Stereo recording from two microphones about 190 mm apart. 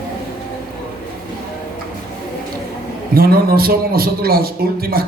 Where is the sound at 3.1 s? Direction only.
50° right (ahead or behind).